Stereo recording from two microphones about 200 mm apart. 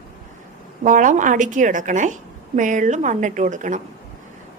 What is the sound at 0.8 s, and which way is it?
A woman's voice, 40° right (ahead or behind).